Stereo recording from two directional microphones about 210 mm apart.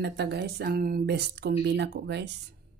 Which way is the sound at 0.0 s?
50° right (ahead or behind).